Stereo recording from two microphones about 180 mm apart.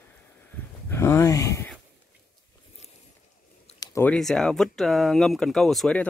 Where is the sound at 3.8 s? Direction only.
15° left (ahead or behind).